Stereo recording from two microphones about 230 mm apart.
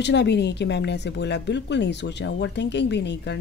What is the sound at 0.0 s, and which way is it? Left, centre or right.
Speech, left.